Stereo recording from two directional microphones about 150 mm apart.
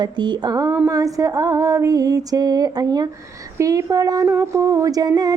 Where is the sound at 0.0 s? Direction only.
30° right (ahead or behind).